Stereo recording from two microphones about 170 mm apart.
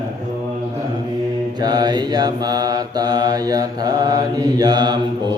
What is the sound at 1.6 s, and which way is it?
Mantra, 25° right (ahead or behind).